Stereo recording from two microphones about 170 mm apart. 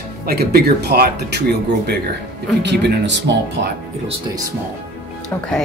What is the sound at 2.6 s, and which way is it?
Speech, 85° right.